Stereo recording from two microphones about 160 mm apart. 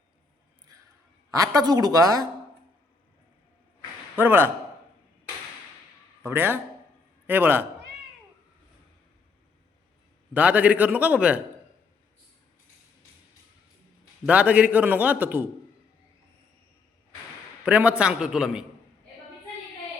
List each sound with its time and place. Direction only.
1.3 s a woman's voice: 20° right (ahead or behind)
4.1 s a man's voice: 10° right (ahead or behind)
6.2 s a man's voice: 15° right (ahead or behind)
10.3 s a man's voice: 10° right (ahead or behind)
14.3 s a man's voice: 10° right (ahead or behind)
17.7 s a man's voice: 10° right (ahead or behind)